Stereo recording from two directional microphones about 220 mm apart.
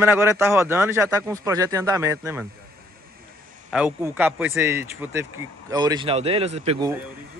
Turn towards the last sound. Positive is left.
turn(degrees=-25)  # may be behind; listen again after turning